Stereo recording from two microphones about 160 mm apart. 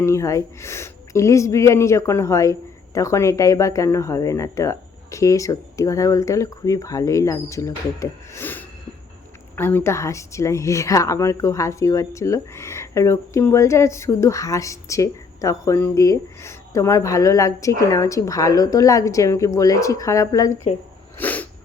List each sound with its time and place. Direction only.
0.0 s speech: 20° left (ahead or behind)
21.2 s sneeze: 10° left (ahead or behind)